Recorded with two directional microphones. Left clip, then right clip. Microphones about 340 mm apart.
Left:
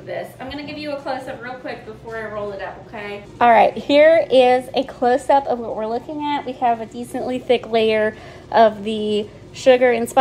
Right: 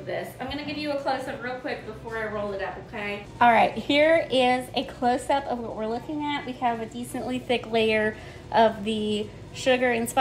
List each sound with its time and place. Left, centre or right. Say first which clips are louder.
0.1 s a woman's voice: left 3 dB; centre
3.3 s a woman's voice: left 6 dB; left